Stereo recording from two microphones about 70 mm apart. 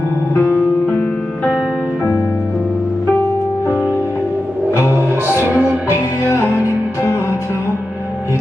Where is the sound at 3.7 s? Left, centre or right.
Left.